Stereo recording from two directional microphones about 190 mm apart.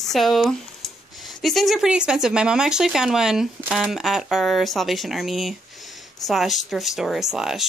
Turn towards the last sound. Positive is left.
turn(degrees=0)  # may be behind; listen again after turning